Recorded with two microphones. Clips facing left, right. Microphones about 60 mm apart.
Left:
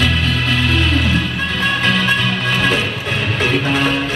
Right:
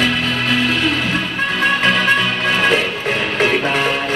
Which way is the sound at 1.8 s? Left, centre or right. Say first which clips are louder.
Even; right.